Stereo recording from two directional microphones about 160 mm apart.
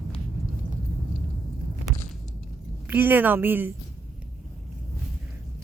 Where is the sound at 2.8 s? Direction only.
10° right (ahead or behind).